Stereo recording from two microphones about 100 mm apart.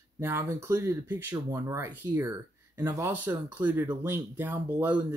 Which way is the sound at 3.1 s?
20° right (ahead or behind).